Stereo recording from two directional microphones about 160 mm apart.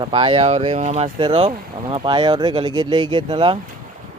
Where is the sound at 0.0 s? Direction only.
35° right (ahead or behind).